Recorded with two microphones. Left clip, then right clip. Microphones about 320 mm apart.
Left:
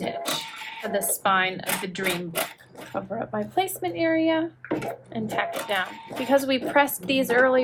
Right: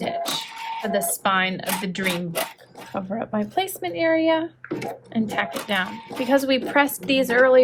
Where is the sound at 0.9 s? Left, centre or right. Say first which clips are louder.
Right 1 dB; right.